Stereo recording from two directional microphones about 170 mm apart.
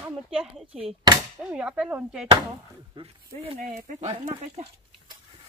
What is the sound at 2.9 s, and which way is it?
Speech, 35° right (ahead or behind).